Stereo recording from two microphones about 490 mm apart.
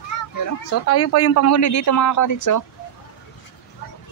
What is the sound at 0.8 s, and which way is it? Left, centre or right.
Speech, left.